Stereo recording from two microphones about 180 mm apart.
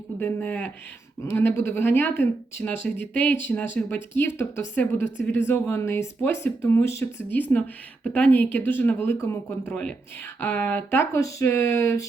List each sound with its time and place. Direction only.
0.2 s speech: 10° left (ahead or behind)